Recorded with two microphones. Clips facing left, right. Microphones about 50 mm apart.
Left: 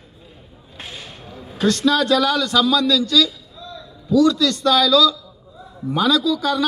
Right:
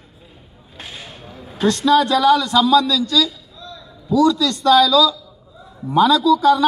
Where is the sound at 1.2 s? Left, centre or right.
Centre.